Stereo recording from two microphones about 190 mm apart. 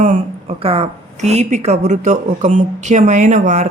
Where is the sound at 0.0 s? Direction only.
35° right (ahead or behind).